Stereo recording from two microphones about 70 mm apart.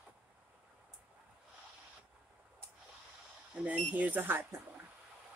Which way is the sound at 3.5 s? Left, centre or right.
Centre.